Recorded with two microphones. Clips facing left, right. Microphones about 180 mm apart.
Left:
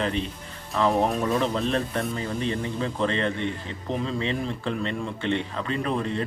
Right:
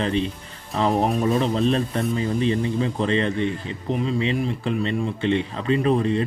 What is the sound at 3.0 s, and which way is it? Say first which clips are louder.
Speech: right 2 dB; 20° right (ahead or behind).